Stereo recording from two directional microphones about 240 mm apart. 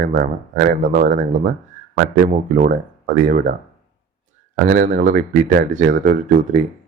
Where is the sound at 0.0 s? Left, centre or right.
Right.